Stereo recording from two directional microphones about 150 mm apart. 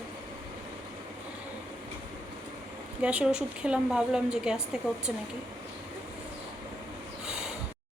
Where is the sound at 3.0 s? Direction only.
5° right (ahead or behind).